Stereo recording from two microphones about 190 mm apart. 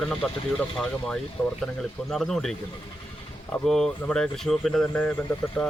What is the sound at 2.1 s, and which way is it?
Speech, centre (ahead or behind).